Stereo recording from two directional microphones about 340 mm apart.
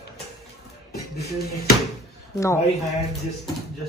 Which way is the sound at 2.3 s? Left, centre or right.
Centre.